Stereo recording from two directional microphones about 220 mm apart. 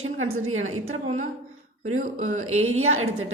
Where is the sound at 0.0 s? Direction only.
65° right (ahead or behind).